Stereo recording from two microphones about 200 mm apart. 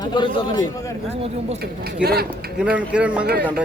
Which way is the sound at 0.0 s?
20° left (ahead or behind).